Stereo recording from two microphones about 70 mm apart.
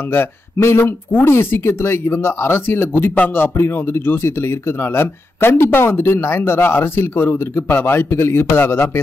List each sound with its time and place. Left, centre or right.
0.1 s speech: left